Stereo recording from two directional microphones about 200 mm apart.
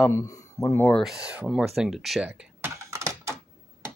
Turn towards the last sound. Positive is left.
turn(degrees=-15)  # may be behind; listen again after turning